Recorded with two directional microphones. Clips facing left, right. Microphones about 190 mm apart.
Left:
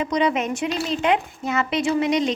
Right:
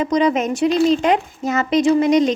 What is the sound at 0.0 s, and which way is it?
A woman's voice, 40° right (ahead or behind).